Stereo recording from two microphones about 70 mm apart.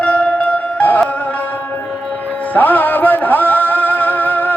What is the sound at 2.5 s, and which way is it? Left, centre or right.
Music, left.